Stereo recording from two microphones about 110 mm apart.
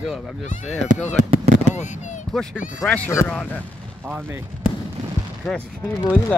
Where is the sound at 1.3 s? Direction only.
70° right (ahead or behind).